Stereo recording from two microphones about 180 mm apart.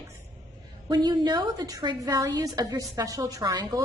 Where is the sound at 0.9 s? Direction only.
25° right (ahead or behind).